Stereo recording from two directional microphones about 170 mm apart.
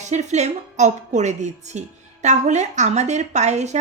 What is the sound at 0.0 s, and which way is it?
A woman's voice, 45° right (ahead or behind).